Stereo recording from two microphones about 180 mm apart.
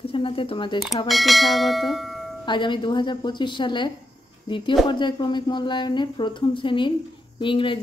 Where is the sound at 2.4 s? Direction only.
25° left (ahead or behind).